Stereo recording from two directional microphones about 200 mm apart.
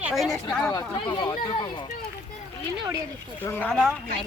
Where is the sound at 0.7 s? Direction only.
15° left (ahead or behind).